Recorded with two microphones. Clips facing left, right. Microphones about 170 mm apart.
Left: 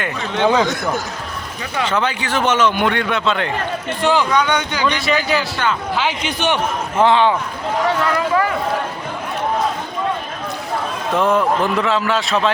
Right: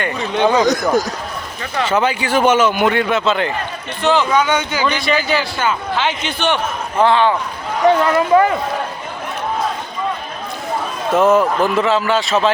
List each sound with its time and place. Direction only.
0.2 s speech: 15° right (ahead or behind)
0.6 s a man's voice: 40° right (ahead or behind)
1.8 s speech: 10° right (ahead or behind)
4.0 s a man's voice: 10° left (ahead or behind)
4.3 s speech: 5° right (ahead or behind)
5.9 s a man's voice: 10° left (ahead or behind)
8.0 s speech: 25° right (ahead or behind)
11.1 s speech: 5° right (ahead or behind)